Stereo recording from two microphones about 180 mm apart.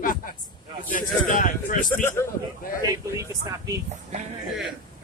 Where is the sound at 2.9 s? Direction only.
15° right (ahead or behind).